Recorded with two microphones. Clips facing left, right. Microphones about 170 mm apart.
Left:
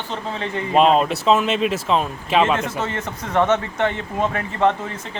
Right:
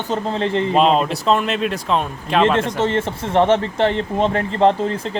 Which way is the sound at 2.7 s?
25° right (ahead or behind).